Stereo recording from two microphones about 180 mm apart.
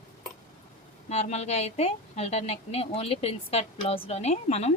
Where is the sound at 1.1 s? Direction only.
35° left (ahead or behind).